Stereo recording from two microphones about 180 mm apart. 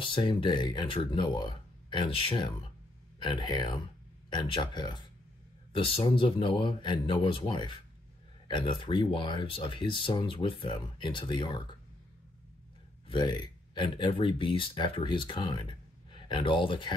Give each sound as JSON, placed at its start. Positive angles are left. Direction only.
{"t": 0.0, "sound": "speech", "side_deg": 30}
{"t": 13.0, "sound": "speech", "side_deg": 25}